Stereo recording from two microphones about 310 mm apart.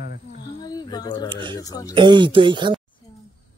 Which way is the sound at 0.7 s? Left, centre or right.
Centre.